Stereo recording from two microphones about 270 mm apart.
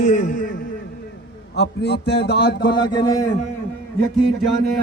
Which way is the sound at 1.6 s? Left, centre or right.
Left.